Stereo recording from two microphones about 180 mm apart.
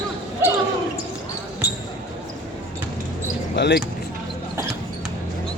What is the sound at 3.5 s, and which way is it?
Basketball bounce, 75° left (ahead or behind).